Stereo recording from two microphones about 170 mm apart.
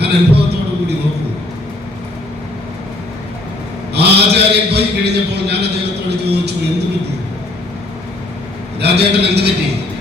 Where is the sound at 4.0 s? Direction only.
75° right (ahead or behind).